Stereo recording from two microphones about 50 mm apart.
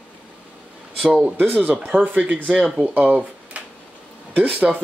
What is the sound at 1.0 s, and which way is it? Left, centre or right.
Speech, right.